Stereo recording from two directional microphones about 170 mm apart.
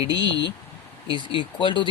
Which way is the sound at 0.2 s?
90° left.